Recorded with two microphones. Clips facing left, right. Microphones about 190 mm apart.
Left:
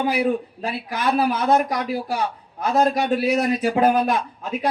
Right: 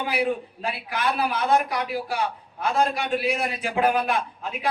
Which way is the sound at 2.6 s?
40° left (ahead or behind).